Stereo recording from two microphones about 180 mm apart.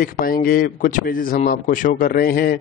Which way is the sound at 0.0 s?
50° left (ahead or behind).